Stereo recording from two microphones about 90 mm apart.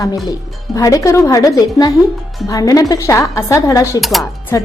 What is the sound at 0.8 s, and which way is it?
A woman's voice, 40° left (ahead or behind).